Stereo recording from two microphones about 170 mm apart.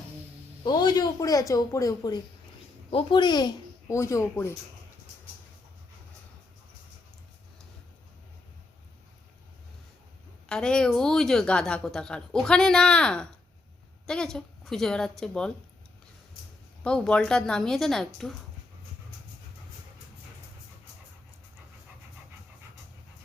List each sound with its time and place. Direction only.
0.6 s speech: 25° left (ahead or behind)
10.5 s a woman's voice: 5° left (ahead or behind)
16.8 s a woman's voice: 5° left (ahead or behind)